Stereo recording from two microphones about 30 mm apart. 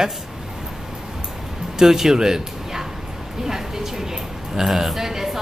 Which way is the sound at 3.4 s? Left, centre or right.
Centre.